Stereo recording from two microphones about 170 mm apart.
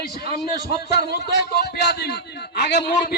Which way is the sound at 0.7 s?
70° left (ahead or behind).